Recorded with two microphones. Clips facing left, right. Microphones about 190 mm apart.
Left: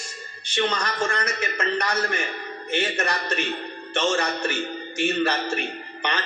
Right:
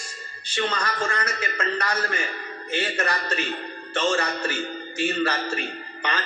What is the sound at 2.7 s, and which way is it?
A man's voice, 20° left (ahead or behind).